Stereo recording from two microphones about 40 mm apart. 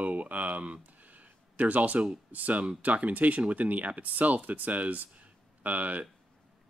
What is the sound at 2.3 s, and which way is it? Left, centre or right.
Speech, right.